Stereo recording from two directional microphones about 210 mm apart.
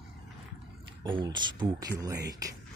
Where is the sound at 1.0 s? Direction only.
20° right (ahead or behind).